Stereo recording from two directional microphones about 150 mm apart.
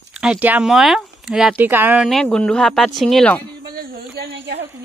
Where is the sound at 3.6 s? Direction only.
90° right.